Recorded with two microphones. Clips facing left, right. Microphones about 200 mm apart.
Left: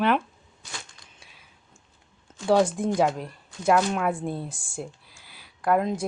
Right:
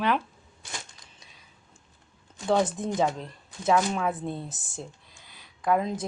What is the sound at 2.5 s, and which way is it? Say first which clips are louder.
Speech: left 4 dB; 10° left (ahead or behind).